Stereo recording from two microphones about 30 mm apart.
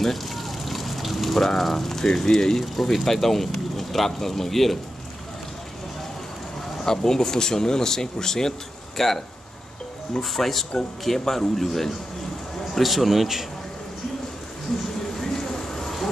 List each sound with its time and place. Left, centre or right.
0.0 s a sound: centre
1.6 s speech: centre
2.7 s speech: centre
6.8 s speech: centre
10.3 s a man's voice: centre
15.1 s a sound: centre